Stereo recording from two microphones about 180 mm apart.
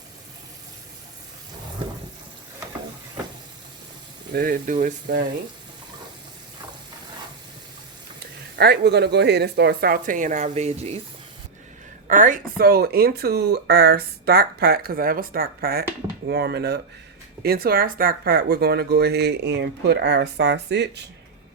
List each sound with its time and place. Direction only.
4.4 s speech: 50° right (ahead or behind)
8.5 s speech: 65° right (ahead or behind); by 11.0 s 40° right (ahead or behind)
12.0 s speech: 45° right (ahead or behind); by 21.0 s 70° right (ahead or behind)